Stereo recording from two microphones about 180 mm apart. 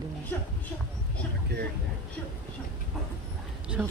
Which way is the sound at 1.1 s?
70° right (ahead or behind).